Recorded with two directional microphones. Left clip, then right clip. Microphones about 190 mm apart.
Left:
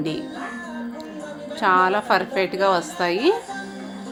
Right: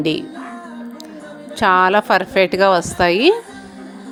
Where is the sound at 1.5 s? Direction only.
40° right (ahead or behind).